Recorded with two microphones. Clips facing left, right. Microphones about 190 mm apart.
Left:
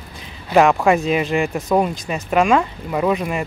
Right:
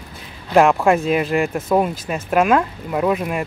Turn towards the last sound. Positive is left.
turn(degrees=-5)  # may be behind; listen again after turning